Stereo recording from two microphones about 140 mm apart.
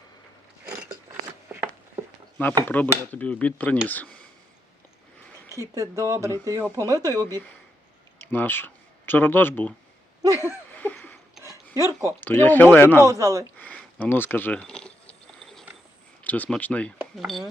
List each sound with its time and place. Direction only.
2.6 s cutlery: 10° left (ahead or behind)
5.5 s speech: 25° right (ahead or behind)
8.3 s speech: 15° left (ahead or behind)
10.3 s laughter: 15° left (ahead or behind)
11.4 s a sound: 25° right (ahead or behind)
12.2 s cutlery: 15° left (ahead or behind)
13.0 s speech: 20° right (ahead or behind)
13.6 s a sound: 10° left (ahead or behind)
16.2 s cutlery: 10° left (ahead or behind)
17.2 s speech: centre (ahead or behind)